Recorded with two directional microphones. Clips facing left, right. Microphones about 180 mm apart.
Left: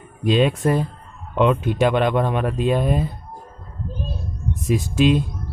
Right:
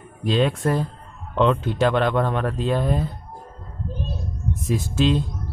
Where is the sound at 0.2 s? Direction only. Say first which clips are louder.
Left 3 dB; 15° left (ahead or behind).